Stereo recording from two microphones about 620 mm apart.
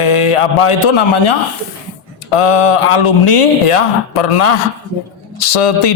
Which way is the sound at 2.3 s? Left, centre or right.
Left.